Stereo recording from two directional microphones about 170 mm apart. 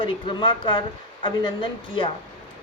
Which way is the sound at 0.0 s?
30° left (ahead or behind).